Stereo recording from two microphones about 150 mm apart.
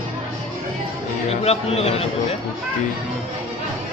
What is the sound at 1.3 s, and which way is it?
Speech, 45° left (ahead or behind).